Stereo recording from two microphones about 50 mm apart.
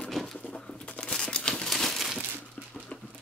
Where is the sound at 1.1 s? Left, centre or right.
Centre.